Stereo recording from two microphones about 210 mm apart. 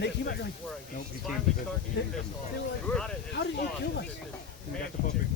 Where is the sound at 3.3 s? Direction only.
55° left (ahead or behind).